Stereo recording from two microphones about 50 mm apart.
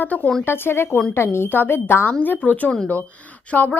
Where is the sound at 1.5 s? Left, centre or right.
Left.